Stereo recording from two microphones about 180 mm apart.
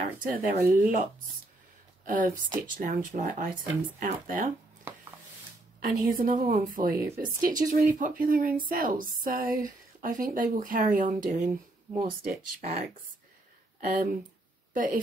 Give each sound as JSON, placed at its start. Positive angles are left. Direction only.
{"t": 0.2, "sound": "speech", "side_deg": -50}
{"t": 2.0, "sound": "speech", "side_deg": -50}
{"t": 5.8, "sound": "speech", "side_deg": -50}
{"t": 13.7, "sound": "a woman's voice", "side_deg": -50}